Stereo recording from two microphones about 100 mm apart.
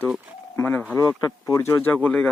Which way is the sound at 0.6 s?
20° left (ahead or behind).